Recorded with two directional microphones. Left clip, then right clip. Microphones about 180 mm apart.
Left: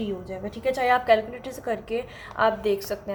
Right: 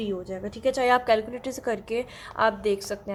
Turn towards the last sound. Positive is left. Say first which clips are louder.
# left 1 dB
turn(degrees=-30)  # may be behind; listen again after turning